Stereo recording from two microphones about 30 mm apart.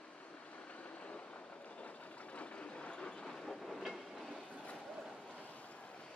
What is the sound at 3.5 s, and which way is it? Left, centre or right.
Train, centre.